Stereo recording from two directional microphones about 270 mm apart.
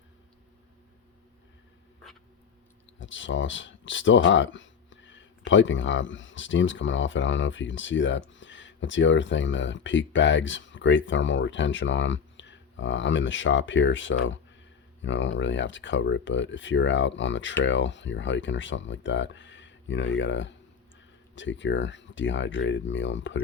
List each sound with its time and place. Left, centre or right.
3.0 s speech: left